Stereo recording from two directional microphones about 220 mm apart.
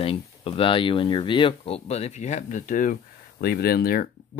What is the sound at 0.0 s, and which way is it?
Speech, 25° left (ahead or behind).